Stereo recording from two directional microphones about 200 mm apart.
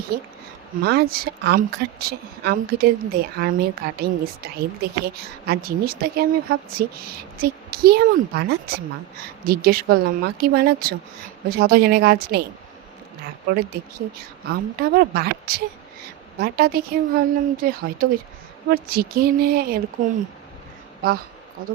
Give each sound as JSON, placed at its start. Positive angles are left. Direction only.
{"t": 0.1, "sound": "a woman's voice", "side_deg": -50}
{"t": 14.5, "sound": "a woman's voice", "side_deg": -50}